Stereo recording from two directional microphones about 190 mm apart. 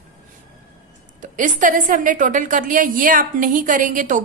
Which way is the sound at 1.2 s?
45° right (ahead or behind).